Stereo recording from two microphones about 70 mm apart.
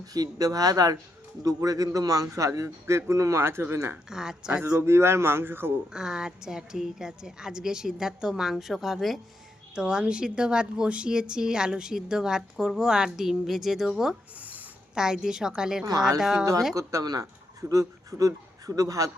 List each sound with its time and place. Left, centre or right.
0.0 s speech: right
4.1 s a woman's voice: centre
4.8 s speech: right
5.9 s a woman's voice: centre
9.7 s a woman's voice: centre
14.3 s a sound: right
14.9 s a woman's voice: centre
15.8 s speech: right
16.2 s a woman's voice: centre
16.7 s a man's voice: right